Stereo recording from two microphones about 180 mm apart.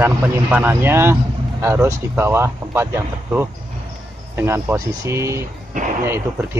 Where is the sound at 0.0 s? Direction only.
10° right (ahead or behind).